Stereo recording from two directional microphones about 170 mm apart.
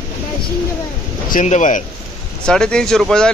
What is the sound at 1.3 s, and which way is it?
Speech, 45° left (ahead or behind).